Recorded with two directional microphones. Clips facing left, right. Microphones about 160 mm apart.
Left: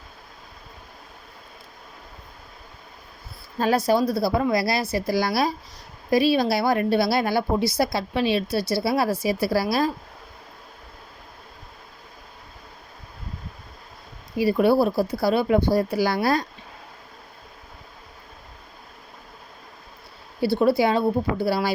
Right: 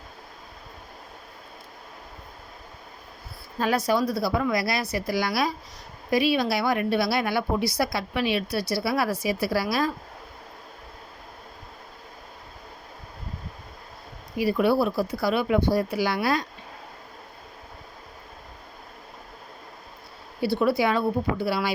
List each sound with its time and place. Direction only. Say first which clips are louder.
3.6 s a woman's voice: left 3 dB; 30° left (ahead or behind)
14.3 s a woman's voice: left 3 dB; 35° left (ahead or behind)
20.4 s a woman's voice: left 3 dB; 35° left (ahead or behind)